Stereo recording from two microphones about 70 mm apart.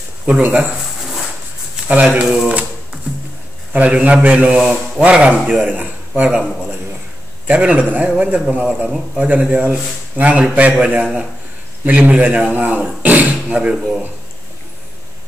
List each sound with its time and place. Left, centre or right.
0.4 s a man's voice: right
1.9 s a man's voice: right
3.7 s a man's voice: right
5.7 s speech: right
7.4 s a man's voice: centre
8.8 s a man's voice: centre
9.2 s a man's voice: right
13.7 s a man's voice: centre